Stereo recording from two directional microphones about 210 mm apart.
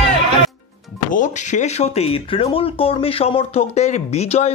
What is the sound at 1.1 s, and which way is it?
Speech, 35° left (ahead or behind).